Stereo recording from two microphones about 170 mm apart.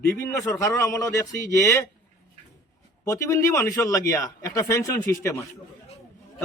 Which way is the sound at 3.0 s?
20° left (ahead or behind).